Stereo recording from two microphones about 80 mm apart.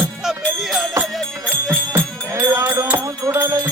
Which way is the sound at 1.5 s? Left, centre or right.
Right.